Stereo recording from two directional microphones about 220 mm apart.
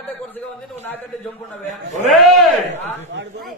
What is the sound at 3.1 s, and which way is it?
Speech, 55° right (ahead or behind).